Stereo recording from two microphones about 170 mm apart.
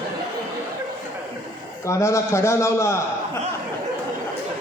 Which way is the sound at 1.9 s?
15° left (ahead or behind).